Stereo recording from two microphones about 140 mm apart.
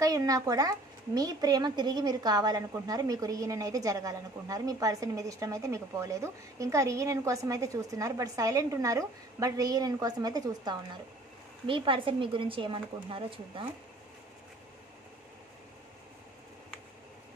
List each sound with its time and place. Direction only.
0.0 s a woman's voice: 25° right (ahead or behind)